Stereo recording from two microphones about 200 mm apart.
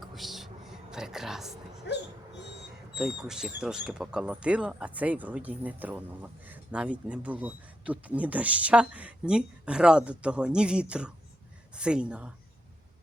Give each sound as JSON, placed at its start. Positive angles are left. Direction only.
{"t": 0.0, "sound": "music", "side_deg": 0}
{"t": 1.9, "sound": "dog", "side_deg": 55}
{"t": 2.9, "sound": "speech", "side_deg": -5}